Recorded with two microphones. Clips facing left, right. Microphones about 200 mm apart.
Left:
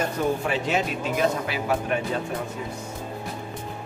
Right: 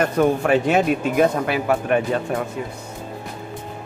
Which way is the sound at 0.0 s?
65° right (ahead or behind).